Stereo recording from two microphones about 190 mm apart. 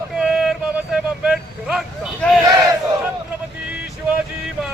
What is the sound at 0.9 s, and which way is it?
Vehicle, 5° right (ahead or behind).